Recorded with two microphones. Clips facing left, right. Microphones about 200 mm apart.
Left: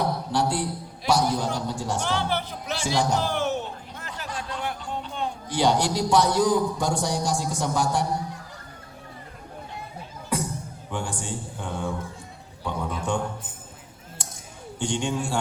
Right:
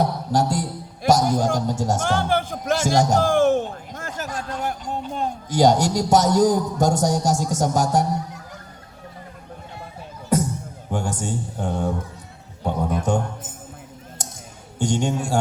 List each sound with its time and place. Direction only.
0.0 s a man's voice: 40° right (ahead or behind)
10.2 s music: 40° right (ahead or behind)
10.9 s a man's voice: 40° right (ahead or behind)
14.2 s a sound: 40° right (ahead or behind)
14.8 s speech: 40° right (ahead or behind)